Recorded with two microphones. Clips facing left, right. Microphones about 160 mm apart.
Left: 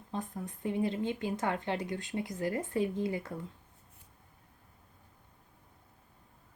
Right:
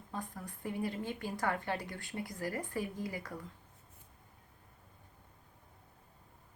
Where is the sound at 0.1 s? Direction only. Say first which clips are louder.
Left 5 dB; 20° left (ahead or behind).